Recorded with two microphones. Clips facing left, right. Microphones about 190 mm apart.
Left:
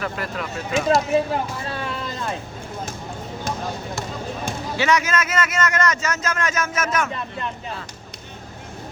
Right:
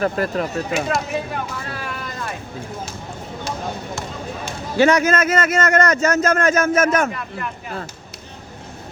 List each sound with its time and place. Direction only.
0.0 s speech: 40° right (ahead or behind)
0.9 s speech: 30° left (ahead or behind)
1.3 s vehicle: 25° left (ahead or behind)
4.8 s a man's voice: 55° right (ahead or behind)
7.1 s speech: 25° left (ahead or behind)